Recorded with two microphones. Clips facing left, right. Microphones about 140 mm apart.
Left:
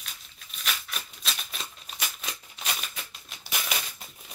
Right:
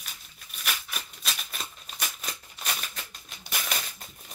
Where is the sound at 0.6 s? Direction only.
5° right (ahead or behind).